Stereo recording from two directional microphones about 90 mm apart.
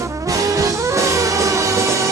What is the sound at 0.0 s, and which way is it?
Music, 40° right (ahead or behind).